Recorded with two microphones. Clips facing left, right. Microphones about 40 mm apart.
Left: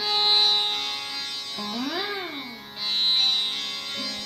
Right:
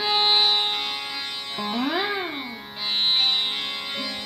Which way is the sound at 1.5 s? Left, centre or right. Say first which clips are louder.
Right 5 dB; right.